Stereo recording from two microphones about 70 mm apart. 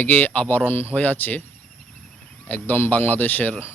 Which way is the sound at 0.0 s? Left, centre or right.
Left.